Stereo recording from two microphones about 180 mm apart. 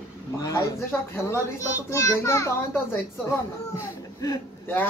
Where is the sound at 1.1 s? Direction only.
15° left (ahead or behind).